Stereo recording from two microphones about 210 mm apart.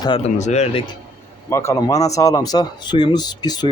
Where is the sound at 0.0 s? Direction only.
25° left (ahead or behind).